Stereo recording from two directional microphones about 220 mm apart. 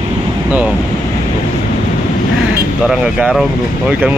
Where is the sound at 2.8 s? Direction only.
5° right (ahead or behind).